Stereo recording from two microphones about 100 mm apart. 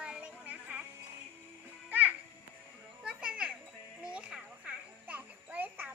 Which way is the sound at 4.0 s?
10° right (ahead or behind).